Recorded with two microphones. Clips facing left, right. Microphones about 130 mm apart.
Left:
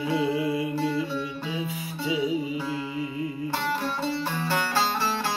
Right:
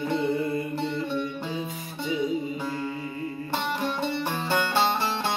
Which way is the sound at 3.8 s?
20° right (ahead or behind).